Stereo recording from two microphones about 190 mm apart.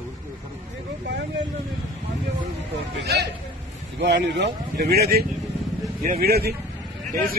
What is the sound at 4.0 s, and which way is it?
Speech, 65° right (ahead or behind).